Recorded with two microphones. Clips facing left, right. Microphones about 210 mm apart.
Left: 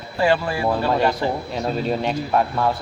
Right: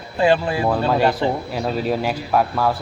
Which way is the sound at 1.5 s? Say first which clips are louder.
Right 1 dB; 5° right (ahead or behind).